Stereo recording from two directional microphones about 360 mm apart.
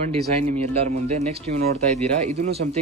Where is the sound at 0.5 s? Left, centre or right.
Centre.